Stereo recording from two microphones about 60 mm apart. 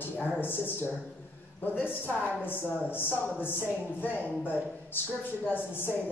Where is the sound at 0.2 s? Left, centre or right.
Left.